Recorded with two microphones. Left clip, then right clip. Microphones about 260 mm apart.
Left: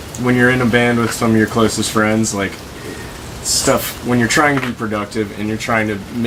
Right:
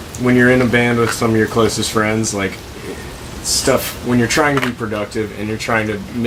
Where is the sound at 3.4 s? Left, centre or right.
Centre.